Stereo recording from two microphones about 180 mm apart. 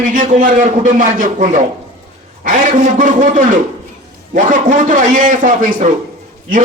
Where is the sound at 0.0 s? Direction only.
45° right (ahead or behind).